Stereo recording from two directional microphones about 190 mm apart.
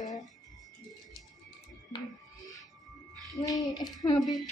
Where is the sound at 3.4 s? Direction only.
20° left (ahead or behind).